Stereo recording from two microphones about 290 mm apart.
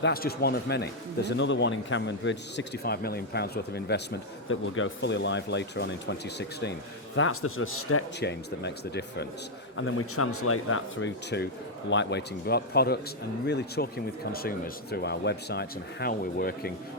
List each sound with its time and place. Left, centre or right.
0.0 s speech: left
8.2 s speech: left